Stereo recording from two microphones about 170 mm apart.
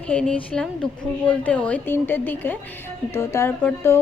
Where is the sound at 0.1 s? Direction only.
5° left (ahead or behind).